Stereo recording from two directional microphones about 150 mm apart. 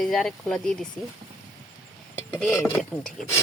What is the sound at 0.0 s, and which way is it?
Speech, centre (ahead or behind).